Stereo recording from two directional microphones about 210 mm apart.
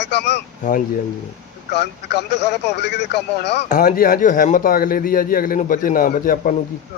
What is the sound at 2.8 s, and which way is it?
Speech, 55° left (ahead or behind).